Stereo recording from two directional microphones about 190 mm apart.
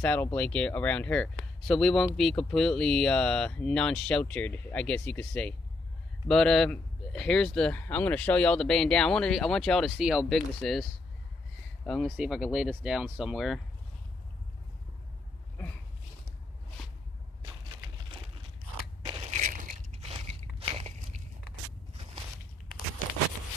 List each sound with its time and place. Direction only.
0.0 s speech: 10° left (ahead or behind)
17.4 s a sound: 25° right (ahead or behind)
19.0 s biting: 30° right (ahead or behind)